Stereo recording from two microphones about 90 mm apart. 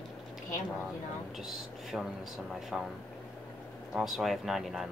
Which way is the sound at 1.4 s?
5° right (ahead or behind).